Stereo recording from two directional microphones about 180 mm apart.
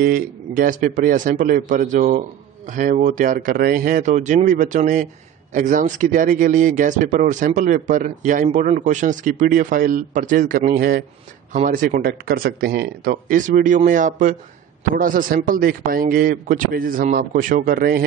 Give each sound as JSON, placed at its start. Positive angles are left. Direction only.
{"t": 0.0, "sound": "a man's voice", "side_deg": -50}
{"t": 11.5, "sound": "a man's voice", "side_deg": -45}